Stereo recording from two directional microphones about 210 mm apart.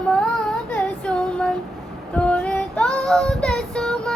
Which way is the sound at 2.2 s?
5° left (ahead or behind).